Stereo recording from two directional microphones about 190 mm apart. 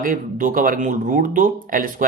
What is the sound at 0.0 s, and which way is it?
Speech, 45° right (ahead or behind).